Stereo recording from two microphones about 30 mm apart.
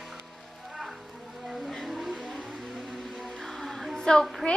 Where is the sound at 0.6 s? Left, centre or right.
Centre.